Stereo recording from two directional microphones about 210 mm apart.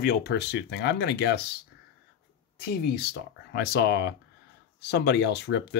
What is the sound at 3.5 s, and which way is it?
Speech, 50° left (ahead or behind).